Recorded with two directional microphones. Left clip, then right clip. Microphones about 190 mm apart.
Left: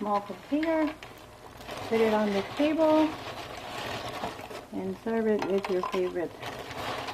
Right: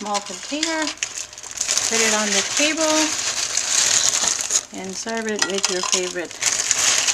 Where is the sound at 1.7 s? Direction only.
20° right (ahead or behind).